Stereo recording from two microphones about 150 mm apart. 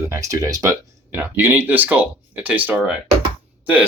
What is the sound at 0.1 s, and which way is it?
Speech, 20° right (ahead or behind).